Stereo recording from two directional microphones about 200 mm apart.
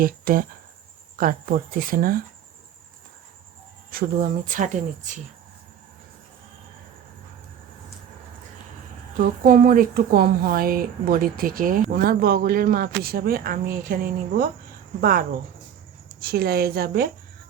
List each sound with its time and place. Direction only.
0.0 s speech: 45° right (ahead or behind)
3.9 s speech: 40° right (ahead or behind)
9.1 s speech: 45° right (ahead or behind)
16.2 s speech: 50° right (ahead or behind)